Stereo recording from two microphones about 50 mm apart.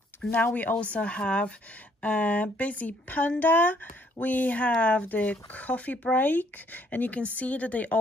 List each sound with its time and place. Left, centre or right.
0.4 s speech: left